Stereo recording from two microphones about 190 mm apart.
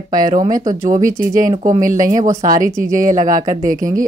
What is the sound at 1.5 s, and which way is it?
Speech, 20° right (ahead or behind).